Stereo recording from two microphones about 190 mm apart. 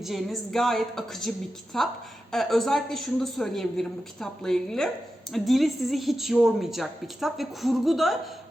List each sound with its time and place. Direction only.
0.0 s a woman's voice: centre (ahead or behind)